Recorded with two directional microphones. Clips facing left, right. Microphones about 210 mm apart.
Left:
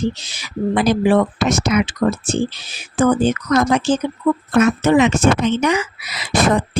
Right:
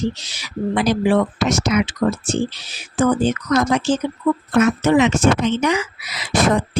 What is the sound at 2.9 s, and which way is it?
Speech, 55° left (ahead or behind).